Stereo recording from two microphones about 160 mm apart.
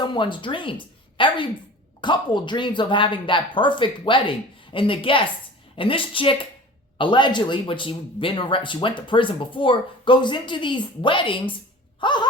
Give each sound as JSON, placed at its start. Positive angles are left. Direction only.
{"t": 0.0, "sound": "speech", "side_deg": 30}
{"t": 11.9, "sound": "sigh", "side_deg": 30}